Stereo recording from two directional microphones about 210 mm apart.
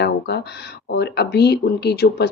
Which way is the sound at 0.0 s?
50° left (ahead or behind).